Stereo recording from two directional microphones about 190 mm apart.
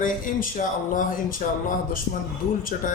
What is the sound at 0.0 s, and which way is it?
Speech, 45° left (ahead or behind).